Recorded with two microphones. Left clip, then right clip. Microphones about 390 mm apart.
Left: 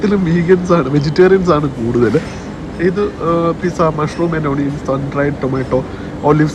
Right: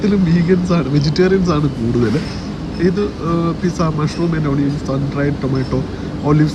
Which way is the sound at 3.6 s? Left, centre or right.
Centre.